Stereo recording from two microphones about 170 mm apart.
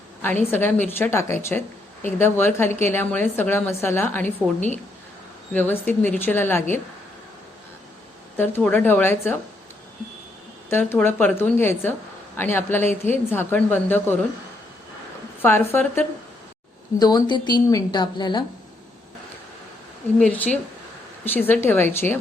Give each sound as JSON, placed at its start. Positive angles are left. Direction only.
{"t": 0.5, "sound": "a woman's voice", "side_deg": 10}
{"t": 5.5, "sound": "a woman's voice", "side_deg": 10}
{"t": 8.4, "sound": "a woman's voice", "side_deg": 10}
{"t": 10.7, "sound": "a woman's voice", "side_deg": 10}
{"t": 15.4, "sound": "a woman's voice", "side_deg": 10}
{"t": 17.0, "sound": "a woman's voice", "side_deg": 25}
{"t": 20.1, "sound": "a woman's voice", "side_deg": 10}